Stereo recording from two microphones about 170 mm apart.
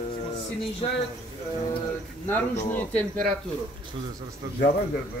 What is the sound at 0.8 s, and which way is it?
Speech, 35° left (ahead or behind).